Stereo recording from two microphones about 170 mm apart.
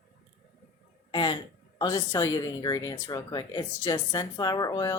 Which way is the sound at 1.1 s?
30° left (ahead or behind).